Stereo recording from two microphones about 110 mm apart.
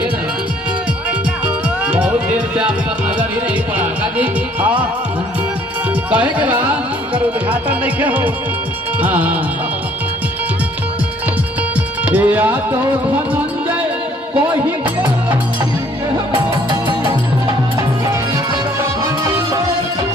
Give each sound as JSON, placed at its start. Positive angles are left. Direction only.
{"t": 1.9, "sound": "music", "side_deg": -10}
{"t": 3.7, "sound": "music", "side_deg": -15}
{"t": 6.0, "sound": "speech", "side_deg": -10}
{"t": 12.1, "sound": "speech", "side_deg": -15}
{"t": 16.3, "sound": "music", "side_deg": -45}